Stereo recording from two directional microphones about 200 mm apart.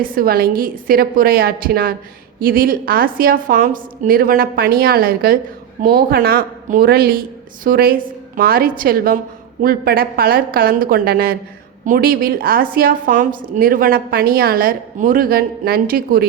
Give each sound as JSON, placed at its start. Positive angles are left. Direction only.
{"t": 0.0, "sound": "a woman's voice", "side_deg": -45}